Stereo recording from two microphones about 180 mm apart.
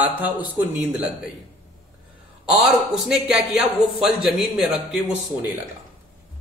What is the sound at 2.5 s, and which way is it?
A man's voice, centre (ahead or behind).